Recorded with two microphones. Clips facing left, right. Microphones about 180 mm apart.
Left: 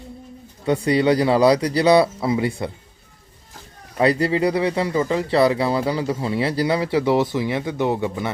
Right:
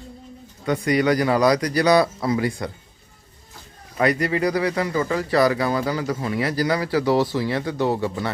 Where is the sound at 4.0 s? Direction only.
30° left (ahead or behind).